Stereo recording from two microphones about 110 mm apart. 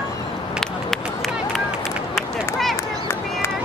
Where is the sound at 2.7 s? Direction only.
25° left (ahead or behind).